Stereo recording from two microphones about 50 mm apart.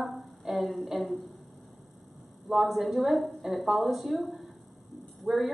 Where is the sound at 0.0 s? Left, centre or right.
Centre.